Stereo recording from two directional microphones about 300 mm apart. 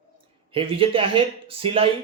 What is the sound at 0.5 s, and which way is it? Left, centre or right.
Speech, centre.